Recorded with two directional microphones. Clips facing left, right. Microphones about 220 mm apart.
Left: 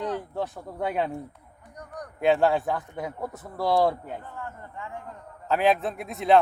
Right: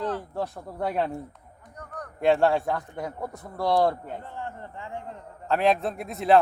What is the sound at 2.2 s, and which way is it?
A man's voice, centre (ahead or behind).